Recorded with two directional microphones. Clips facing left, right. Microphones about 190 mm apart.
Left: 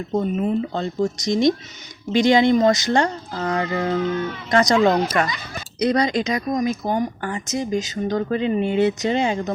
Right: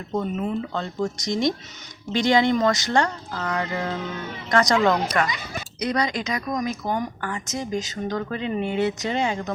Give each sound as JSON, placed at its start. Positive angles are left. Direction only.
{"t": 0.2, "sound": "speech", "side_deg": 20}